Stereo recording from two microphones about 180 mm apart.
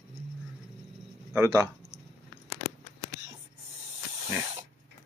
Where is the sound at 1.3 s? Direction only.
15° right (ahead or behind).